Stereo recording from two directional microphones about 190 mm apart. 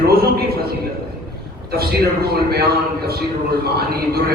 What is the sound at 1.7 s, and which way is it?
Speech, 55° right (ahead or behind).